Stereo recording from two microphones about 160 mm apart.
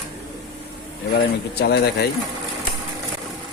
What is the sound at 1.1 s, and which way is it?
Speech, 85° left.